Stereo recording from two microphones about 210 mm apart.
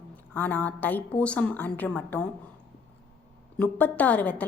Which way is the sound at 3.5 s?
5° left (ahead or behind).